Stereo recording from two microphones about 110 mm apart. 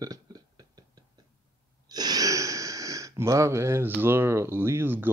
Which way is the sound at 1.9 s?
35° right (ahead or behind).